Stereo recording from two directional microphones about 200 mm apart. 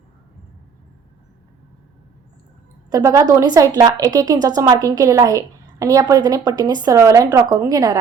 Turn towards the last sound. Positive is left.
turn(degrees=-15)  # may be behind; listen again after turning